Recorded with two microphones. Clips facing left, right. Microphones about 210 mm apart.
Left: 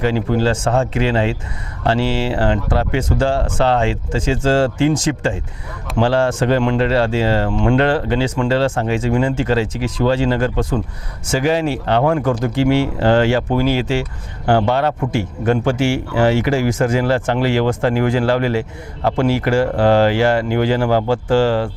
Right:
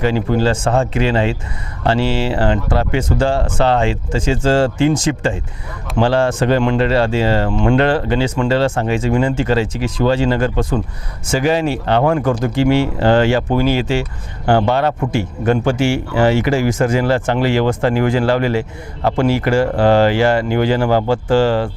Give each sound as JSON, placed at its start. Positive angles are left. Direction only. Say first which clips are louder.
{"t": 0.0, "sound": "speech", "louder": "right 1 dB", "side_deg": -20}
{"t": 6.0, "sound": "speech", "louder": "right 1 dB", "side_deg": -25}